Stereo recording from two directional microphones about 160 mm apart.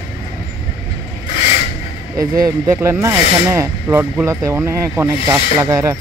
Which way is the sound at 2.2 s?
20° right (ahead or behind).